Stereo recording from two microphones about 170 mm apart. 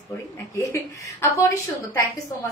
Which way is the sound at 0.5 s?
20° left (ahead or behind).